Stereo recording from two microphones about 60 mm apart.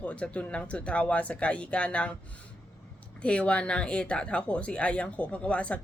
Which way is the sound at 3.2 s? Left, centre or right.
Centre.